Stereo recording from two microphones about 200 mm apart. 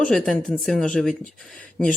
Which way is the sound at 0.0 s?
5° left (ahead or behind).